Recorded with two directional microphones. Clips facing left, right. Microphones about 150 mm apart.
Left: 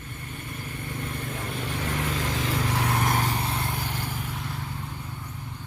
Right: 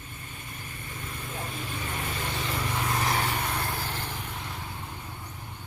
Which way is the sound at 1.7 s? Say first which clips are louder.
Left 8 dB; 85° left.